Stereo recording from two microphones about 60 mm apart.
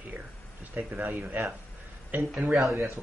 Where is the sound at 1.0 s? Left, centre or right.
Right.